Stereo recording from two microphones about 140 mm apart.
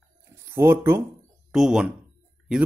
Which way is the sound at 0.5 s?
20° right (ahead or behind).